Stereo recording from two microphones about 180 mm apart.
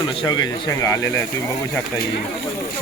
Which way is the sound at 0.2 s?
20° left (ahead or behind).